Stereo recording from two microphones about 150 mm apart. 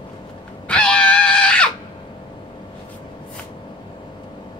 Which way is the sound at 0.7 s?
5° left (ahead or behind).